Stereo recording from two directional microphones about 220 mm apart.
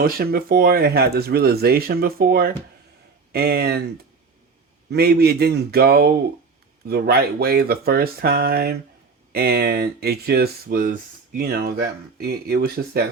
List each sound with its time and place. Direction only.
0.0 s speech: 45° right (ahead or behind)
4.9 s speech: 45° right (ahead or behind)